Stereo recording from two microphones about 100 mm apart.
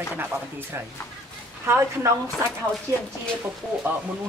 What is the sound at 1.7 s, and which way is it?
A woman's voice, 30° right (ahead or behind).